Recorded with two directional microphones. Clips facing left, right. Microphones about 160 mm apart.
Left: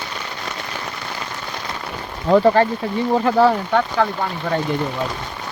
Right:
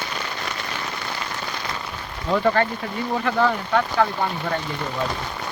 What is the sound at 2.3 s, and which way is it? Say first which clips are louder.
Speech: left 6 dB; 30° left (ahead or behind).